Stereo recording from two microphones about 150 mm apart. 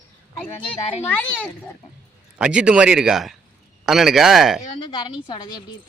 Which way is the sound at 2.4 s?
5° right (ahead or behind).